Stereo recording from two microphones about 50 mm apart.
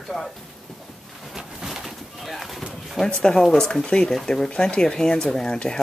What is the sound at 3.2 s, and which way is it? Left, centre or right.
Speech, centre.